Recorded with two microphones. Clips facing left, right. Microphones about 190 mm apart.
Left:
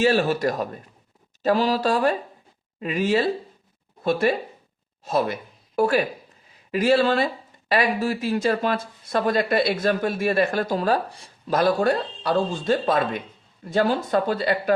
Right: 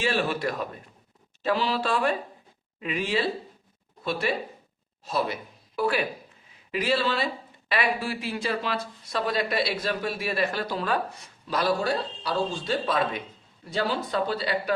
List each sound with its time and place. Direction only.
0.0 s speech: 45° left (ahead or behind)
11.4 s speech: 50° left (ahead or behind)